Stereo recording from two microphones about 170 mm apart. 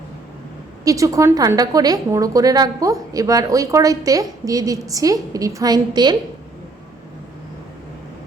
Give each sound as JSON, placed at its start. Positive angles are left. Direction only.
{"t": 0.9, "sound": "a woman's voice", "side_deg": -20}